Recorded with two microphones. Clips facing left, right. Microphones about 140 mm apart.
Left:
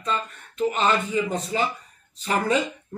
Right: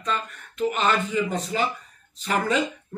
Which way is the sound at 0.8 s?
35° left (ahead or behind).